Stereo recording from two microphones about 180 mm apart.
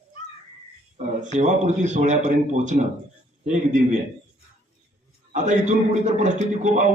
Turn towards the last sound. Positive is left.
turn(degrees=-40)  # may be behind; listen again after turning